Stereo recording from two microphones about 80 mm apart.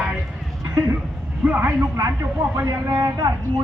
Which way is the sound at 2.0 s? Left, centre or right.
Right.